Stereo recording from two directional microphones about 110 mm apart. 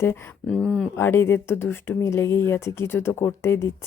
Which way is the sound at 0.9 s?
25° left (ahead or behind).